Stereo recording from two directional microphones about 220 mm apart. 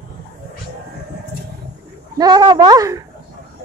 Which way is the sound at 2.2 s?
20° right (ahead or behind).